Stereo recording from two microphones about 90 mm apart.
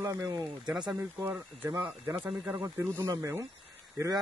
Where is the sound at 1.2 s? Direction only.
35° right (ahead or behind).